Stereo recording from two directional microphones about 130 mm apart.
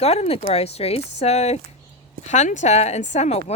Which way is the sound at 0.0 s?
55° left (ahead or behind).